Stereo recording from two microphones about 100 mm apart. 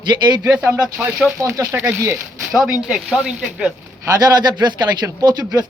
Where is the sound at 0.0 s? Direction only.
50° right (ahead or behind).